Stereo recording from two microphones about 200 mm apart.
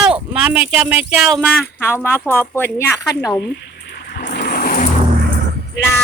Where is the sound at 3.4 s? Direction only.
55° left (ahead or behind).